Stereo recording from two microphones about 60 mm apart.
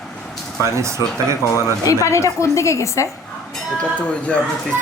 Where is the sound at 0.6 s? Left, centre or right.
Right.